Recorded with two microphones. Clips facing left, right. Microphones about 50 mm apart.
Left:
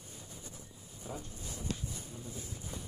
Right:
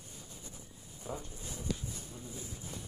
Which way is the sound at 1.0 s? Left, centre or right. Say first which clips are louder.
Right 2 dB; centre.